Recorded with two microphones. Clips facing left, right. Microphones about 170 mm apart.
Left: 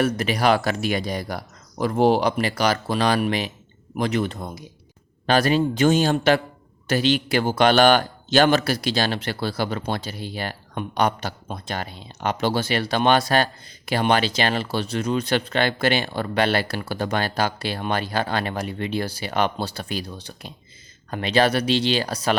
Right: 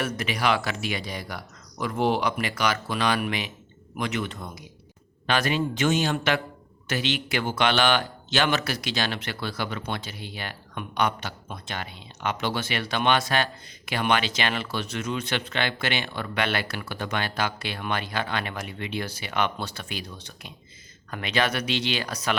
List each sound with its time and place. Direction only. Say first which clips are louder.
0.0 s speech: left 6 dB; 35° left (ahead or behind)